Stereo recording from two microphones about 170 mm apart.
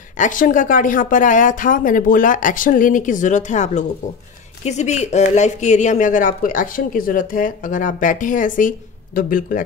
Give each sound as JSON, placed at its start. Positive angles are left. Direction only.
{"t": 0.2, "sound": "speech", "side_deg": 50}